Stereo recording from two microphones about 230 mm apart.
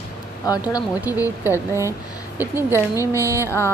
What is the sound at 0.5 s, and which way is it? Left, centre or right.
Speech, centre.